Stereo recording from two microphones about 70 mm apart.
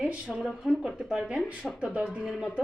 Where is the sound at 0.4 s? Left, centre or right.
Centre.